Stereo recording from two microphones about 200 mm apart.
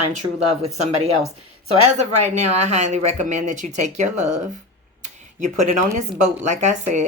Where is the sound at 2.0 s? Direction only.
35° right (ahead or behind).